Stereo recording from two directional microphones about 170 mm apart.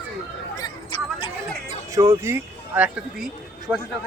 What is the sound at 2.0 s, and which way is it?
Speech, 15° right (ahead or behind).